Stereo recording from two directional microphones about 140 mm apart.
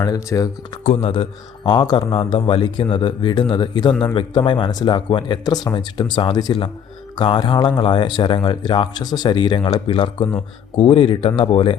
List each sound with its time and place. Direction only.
0.0 s speech: 25° left (ahead or behind)
1.0 s speech: 35° left (ahead or behind)